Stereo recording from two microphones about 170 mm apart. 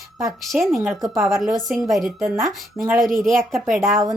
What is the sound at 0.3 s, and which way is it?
Speech, centre (ahead or behind).